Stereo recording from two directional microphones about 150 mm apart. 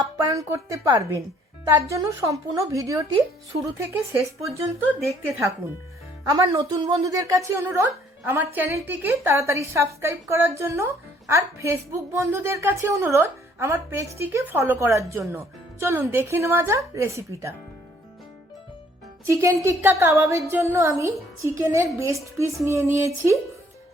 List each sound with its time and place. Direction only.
0.0 s speech: 20° right (ahead or behind)
4.1 s speech: 20° right (ahead or behind)
4.9 s a woman's voice: centre (ahead or behind)
6.3 s speech: 25° right (ahead or behind)
19.3 s speech: 20° right (ahead or behind)